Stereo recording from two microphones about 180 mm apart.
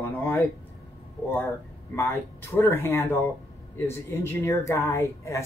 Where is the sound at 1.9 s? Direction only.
15° left (ahead or behind).